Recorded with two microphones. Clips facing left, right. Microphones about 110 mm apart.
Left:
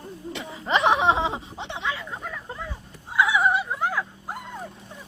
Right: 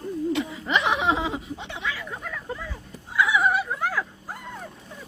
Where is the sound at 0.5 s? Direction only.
35° left (ahead or behind).